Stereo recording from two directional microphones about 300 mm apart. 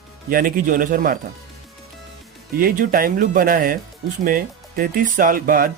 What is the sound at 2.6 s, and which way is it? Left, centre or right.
Speech, right.